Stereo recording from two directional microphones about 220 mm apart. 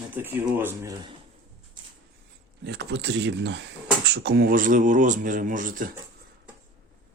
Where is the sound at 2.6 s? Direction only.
50° right (ahead or behind).